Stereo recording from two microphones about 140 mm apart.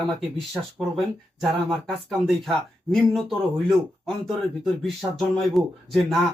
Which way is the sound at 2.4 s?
Centre (ahead or behind).